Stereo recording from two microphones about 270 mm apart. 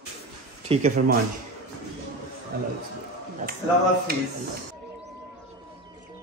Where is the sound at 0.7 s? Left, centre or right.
Right.